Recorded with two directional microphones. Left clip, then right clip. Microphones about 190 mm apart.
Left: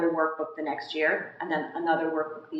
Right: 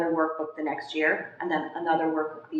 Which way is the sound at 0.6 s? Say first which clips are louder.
Right 1 dB; 20° right (ahead or behind).